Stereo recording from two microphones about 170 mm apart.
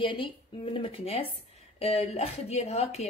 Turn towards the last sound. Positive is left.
turn(degrees=40)  # may be behind; listen again after turning